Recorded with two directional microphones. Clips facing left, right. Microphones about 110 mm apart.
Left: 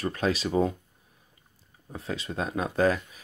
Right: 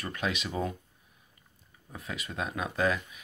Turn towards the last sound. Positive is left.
turn(degrees=35)  # may be behind; listen again after turning